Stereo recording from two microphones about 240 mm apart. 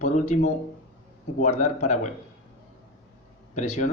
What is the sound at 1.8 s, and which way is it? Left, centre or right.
Speech, left.